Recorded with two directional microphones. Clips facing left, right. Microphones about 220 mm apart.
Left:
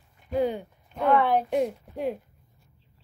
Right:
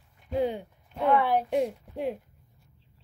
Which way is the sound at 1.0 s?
10° right (ahead or behind).